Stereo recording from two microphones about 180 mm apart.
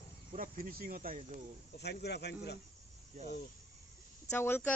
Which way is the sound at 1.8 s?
70° left (ahead or behind).